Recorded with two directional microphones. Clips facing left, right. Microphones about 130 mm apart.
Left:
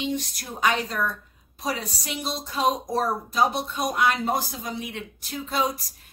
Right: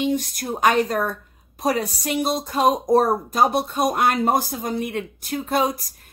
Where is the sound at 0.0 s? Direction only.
50° right (ahead or behind).